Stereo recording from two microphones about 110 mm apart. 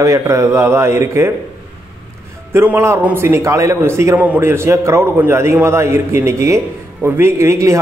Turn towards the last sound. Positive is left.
turn(degrees=-25)  # may be behind; listen again after turning